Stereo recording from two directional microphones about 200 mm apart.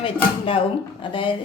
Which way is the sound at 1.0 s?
25° left (ahead or behind).